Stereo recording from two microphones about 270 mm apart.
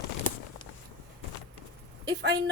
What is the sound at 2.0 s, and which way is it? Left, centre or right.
Speech, right.